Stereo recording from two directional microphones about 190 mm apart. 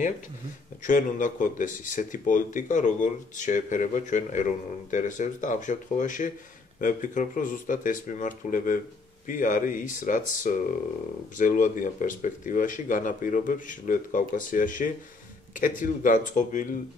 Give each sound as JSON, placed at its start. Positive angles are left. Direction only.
{"t": 0.8, "sound": "speech", "side_deg": 45}